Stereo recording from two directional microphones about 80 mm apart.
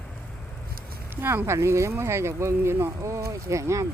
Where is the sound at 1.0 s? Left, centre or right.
Right.